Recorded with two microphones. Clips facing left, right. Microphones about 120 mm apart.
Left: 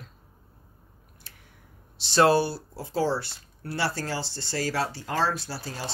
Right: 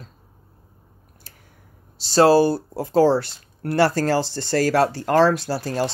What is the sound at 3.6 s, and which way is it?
Speech, 50° right (ahead or behind).